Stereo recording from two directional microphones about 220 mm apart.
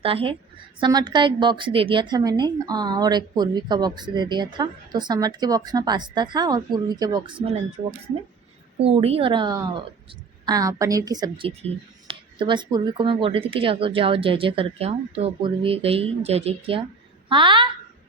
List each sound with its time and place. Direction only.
0.0 s a woman's voice: 25° right (ahead or behind)
8.8 s a woman's voice: 25° right (ahead or behind)